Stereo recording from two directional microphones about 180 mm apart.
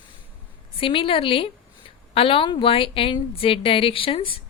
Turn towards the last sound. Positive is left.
turn(degrees=30)  # may be behind; listen again after turning